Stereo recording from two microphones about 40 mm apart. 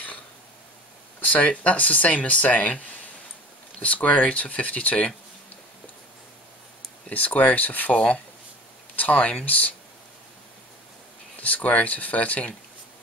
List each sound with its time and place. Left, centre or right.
1.2 s speech: left
3.8 s speech: left
7.1 s speech: left
11.3 s speech: left